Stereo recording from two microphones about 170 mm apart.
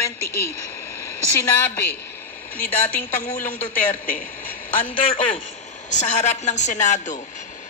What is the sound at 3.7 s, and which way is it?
Speech, 55° left (ahead or behind).